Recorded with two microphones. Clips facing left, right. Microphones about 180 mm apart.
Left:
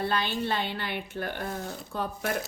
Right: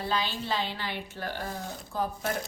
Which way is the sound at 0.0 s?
60° left (ahead or behind).